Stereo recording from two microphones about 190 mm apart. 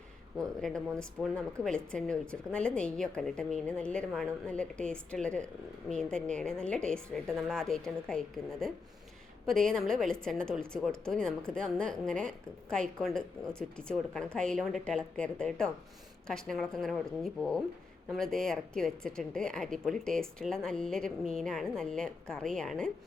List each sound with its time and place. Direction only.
0.3 s speech: centre (ahead or behind)